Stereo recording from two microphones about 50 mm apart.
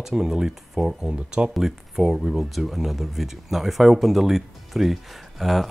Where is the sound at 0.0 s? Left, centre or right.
Centre.